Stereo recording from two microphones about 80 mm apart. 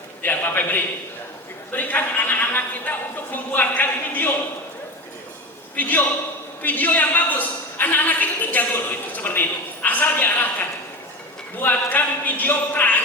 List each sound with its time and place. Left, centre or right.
0.2 s a man's voice: left
3.3 s a sound: left
5.7 s a woman's voice: left